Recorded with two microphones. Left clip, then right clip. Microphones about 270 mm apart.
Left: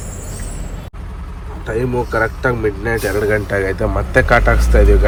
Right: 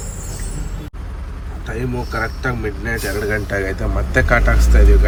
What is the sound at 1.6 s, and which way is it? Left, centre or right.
Speech, centre.